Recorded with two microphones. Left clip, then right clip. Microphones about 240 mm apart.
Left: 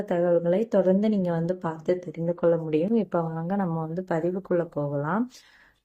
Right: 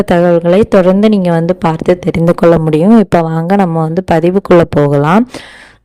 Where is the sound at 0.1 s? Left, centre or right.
Right.